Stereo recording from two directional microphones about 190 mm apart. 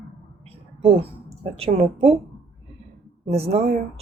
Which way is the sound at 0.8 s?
30° right (ahead or behind).